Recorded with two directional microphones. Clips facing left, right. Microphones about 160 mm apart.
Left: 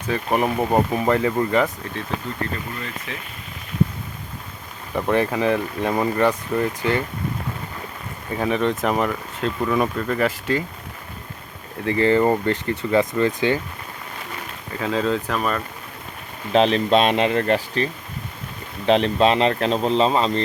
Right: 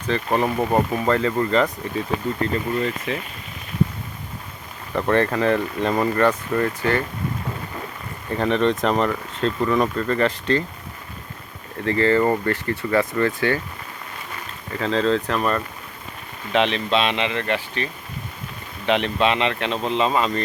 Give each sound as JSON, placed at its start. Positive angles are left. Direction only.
{"t": 0.1, "sound": "speech", "side_deg": 10}
{"t": 4.9, "sound": "speech", "side_deg": 10}
{"t": 8.3, "sound": "speech", "side_deg": 5}
{"t": 11.9, "sound": "speech", "side_deg": 15}
{"t": 14.8, "sound": "speech", "side_deg": 10}
{"t": 16.5, "sound": "a man's voice", "side_deg": 35}
{"t": 18.9, "sound": "a man's voice", "side_deg": 35}